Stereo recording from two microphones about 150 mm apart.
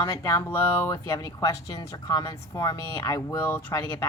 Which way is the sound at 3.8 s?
30° left (ahead or behind).